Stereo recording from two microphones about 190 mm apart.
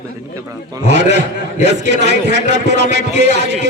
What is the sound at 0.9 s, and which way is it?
A man's voice, 65° right (ahead or behind).